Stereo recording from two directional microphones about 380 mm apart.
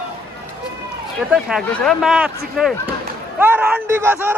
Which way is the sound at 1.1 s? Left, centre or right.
Centre.